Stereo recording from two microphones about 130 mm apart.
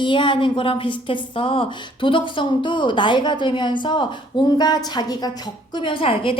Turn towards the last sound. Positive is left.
turn(degrees=45)  # may be behind; listen again after turning